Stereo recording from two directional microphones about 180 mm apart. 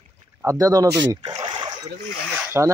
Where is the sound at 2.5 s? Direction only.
15° right (ahead or behind).